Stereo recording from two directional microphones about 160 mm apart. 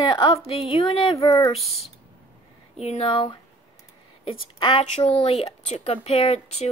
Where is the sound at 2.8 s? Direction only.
40° left (ahead or behind).